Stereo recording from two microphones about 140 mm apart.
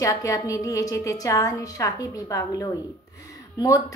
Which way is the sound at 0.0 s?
20° left (ahead or behind).